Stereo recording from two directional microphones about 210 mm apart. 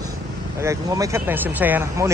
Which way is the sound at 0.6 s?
15° right (ahead or behind).